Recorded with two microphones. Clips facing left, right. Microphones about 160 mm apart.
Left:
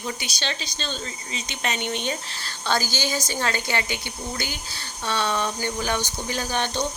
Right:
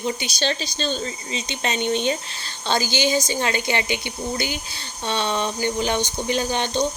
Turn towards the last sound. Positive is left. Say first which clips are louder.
# right 4 dB
turn(degrees=-20)  # may be behind; listen again after turning